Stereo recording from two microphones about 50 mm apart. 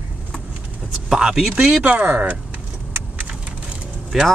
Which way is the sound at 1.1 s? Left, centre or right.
Centre.